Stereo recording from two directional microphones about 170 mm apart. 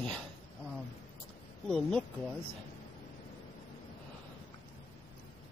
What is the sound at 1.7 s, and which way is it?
Speech, 5° left (ahead or behind).